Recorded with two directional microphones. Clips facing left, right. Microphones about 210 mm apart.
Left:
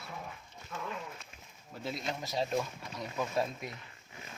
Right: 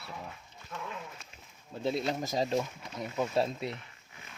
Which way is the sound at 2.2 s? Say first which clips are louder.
Right 3 dB; 45° right (ahead or behind).